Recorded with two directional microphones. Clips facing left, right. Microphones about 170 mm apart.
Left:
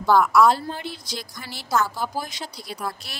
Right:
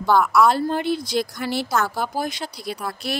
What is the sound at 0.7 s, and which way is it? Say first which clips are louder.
Speech: right 9 dB; 60° right (ahead or behind).